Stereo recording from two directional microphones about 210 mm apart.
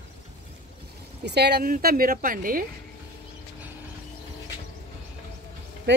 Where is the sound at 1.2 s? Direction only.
50° right (ahead or behind).